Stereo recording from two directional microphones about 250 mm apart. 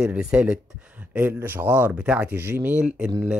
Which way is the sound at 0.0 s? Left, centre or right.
Centre.